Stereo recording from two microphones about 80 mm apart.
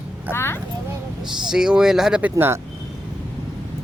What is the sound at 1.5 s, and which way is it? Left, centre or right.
Speech, centre.